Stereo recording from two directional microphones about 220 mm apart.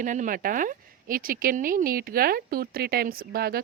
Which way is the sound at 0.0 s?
35° right (ahead or behind).